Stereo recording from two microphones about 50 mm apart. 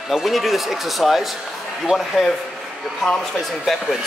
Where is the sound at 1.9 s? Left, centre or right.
Centre.